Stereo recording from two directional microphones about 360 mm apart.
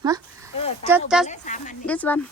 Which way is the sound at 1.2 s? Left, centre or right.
Left.